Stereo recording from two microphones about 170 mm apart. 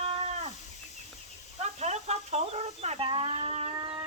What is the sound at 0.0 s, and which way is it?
Livestock, 35° right (ahead or behind).